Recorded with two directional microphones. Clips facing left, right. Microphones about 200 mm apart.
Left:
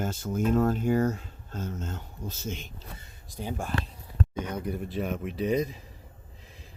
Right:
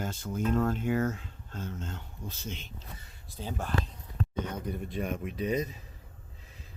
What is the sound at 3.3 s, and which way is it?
Speech, 15° left (ahead or behind).